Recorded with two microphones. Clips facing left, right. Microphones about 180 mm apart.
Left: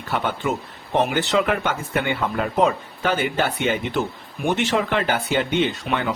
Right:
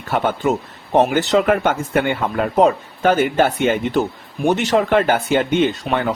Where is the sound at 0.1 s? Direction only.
50° right (ahead or behind).